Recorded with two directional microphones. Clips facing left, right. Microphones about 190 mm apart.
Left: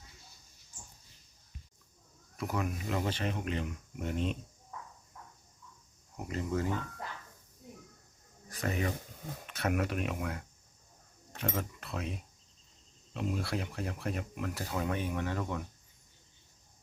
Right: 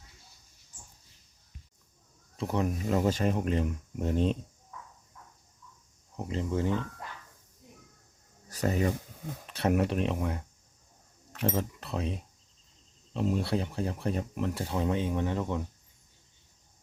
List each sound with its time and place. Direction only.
2.3 s speech: 30° right (ahead or behind)
6.1 s speech: 25° right (ahead or behind)
8.4 s speech: 35° right (ahead or behind)
11.4 s speech: 30° right (ahead or behind)